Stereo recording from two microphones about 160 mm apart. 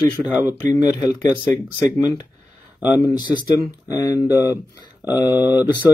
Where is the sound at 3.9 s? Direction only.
25° left (ahead or behind).